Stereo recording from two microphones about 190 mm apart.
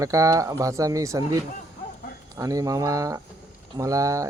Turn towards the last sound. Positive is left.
turn(degrees=-15)  # may be behind; listen again after turning